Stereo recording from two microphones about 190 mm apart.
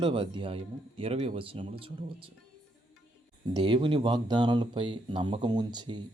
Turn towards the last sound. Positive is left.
turn(degrees=-25)  # may be behind; listen again after turning